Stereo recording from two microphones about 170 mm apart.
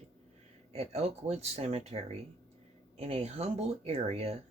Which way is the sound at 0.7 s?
35° right (ahead or behind).